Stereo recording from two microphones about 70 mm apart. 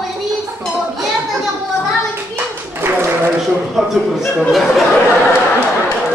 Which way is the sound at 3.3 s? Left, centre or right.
Centre.